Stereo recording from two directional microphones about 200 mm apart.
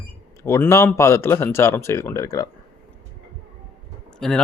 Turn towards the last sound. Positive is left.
turn(degrees=5)  # may be behind; listen again after turning